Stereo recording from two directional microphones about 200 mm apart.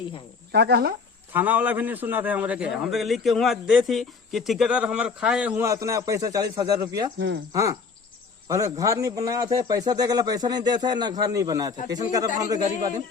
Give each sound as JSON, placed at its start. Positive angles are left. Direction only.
{"t": 0.5, "sound": "speech", "side_deg": -55}
{"t": 1.3, "sound": "a man's voice", "side_deg": -10}
{"t": 7.2, "sound": "speech", "side_deg": -65}
{"t": 7.5, "sound": "a man's voice", "side_deg": -15}